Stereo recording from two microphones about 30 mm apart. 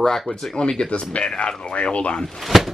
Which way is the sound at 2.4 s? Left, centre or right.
Centre.